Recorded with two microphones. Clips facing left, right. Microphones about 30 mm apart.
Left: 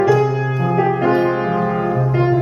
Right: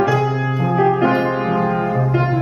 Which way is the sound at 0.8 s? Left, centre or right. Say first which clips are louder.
Right 2 dB; centre.